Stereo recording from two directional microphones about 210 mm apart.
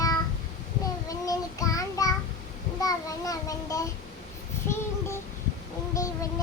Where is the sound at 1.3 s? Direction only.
15° left (ahead or behind).